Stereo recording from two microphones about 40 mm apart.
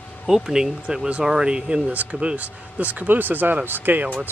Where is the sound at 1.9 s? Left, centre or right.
Right.